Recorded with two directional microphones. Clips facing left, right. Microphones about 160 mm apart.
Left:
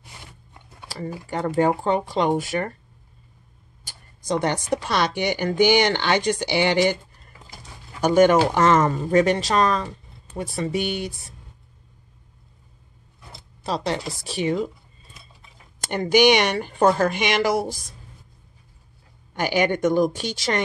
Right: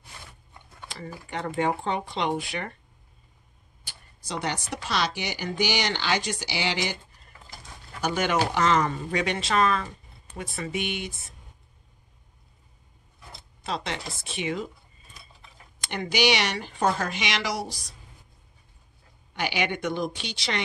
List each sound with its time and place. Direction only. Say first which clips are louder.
0.8 s a sound: left 7 dB; 35° left (ahead or behind)
1.3 s speech: left 6 dB; 40° left (ahead or behind)
3.8 s speech: left 11 dB; 50° left (ahead or behind)
8.0 s speech: left 10 dB; 50° left (ahead or behind)
13.7 s speech: left 6 dB; 35° left (ahead or behind)
15.8 s speech: left 8 dB; 45° left (ahead or behind)
19.3 s speech: left 7 dB; 45° left (ahead or behind)